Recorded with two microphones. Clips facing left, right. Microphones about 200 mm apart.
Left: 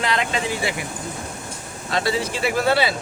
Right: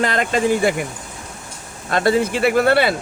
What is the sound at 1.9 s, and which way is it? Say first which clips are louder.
Speech: right 6 dB; 50° right (ahead or behind).